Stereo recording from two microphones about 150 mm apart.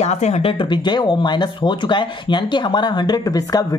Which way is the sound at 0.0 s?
45° left (ahead or behind).